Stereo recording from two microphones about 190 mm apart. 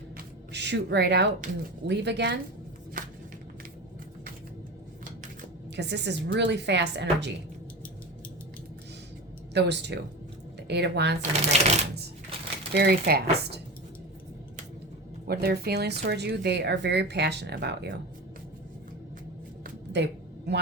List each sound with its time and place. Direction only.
0.5 s speech: 65° right (ahead or behind)
5.7 s speech: 65° right (ahead or behind)
9.6 s speech: 65° right (ahead or behind)
11.2 s speech: 35° right (ahead or behind)
12.7 s speech: 55° right (ahead or behind)
15.3 s speech: 55° right (ahead or behind)
19.6 s a sound: 65° right (ahead or behind)